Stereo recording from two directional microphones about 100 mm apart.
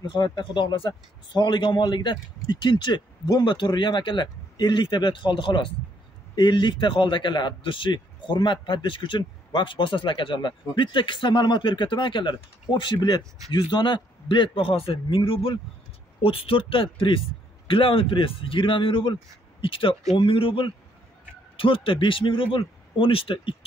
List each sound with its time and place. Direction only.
0.0 s a man's voice: 50° left (ahead or behind)